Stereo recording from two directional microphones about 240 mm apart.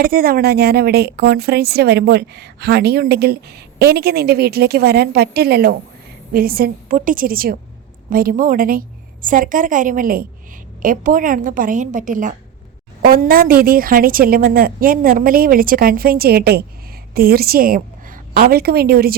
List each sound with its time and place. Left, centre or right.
0.0 s a woman's voice: right